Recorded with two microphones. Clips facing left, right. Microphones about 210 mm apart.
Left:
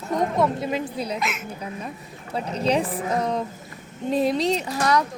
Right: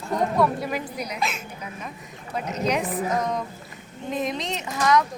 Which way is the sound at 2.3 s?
30° left (ahead or behind).